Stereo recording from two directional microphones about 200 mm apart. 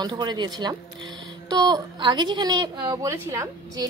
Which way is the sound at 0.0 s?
20° right (ahead or behind).